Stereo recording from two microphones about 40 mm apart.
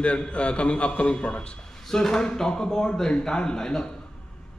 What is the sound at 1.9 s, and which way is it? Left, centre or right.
A man's voice, centre.